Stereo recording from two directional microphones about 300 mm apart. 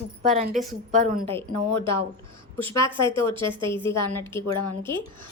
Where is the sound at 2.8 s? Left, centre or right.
Centre.